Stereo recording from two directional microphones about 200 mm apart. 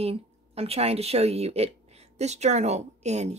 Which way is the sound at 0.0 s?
30° right (ahead or behind).